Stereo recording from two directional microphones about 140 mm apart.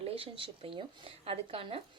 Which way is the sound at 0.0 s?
40° right (ahead or behind).